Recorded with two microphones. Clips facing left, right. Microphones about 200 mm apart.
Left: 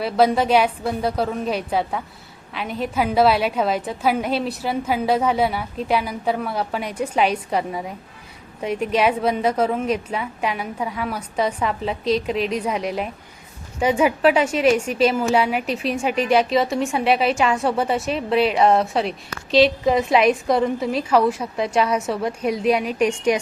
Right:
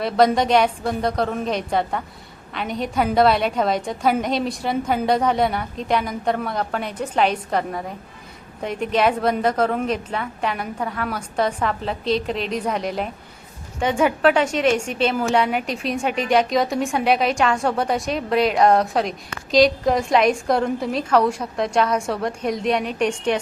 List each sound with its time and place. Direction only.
0.0 s a woman's voice: 5° left (ahead or behind)